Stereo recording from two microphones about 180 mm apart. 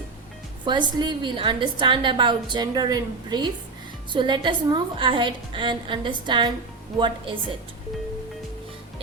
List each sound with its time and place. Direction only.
0.6 s a woman's voice: 25° right (ahead or behind)